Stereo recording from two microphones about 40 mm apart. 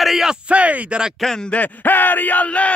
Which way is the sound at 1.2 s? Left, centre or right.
Centre.